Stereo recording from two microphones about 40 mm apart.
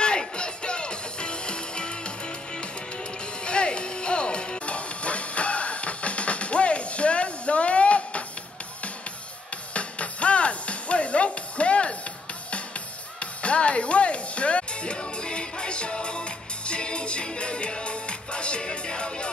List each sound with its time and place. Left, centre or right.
0.0 s music: left
9.8 s music: left